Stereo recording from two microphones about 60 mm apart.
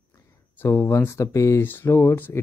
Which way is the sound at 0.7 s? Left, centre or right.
Left.